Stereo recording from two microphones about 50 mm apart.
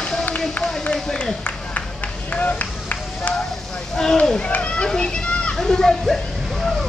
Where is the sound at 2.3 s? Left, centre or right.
Left.